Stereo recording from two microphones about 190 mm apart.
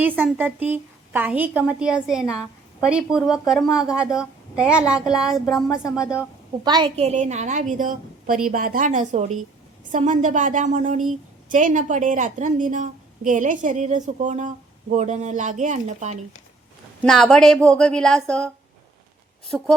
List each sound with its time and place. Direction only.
0.0 s a woman's voice: 10° right (ahead or behind)
6.7 s a woman's voice: 25° right (ahead or behind)
17.0 s a woman's voice: centre (ahead or behind)